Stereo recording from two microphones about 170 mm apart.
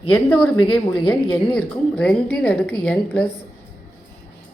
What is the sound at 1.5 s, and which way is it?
A woman's voice, 5° left (ahead or behind).